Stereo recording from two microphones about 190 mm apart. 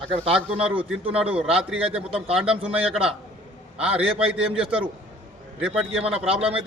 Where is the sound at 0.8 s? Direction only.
30° right (ahead or behind).